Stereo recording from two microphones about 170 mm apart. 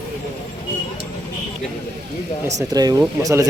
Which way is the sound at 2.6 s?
20° right (ahead or behind).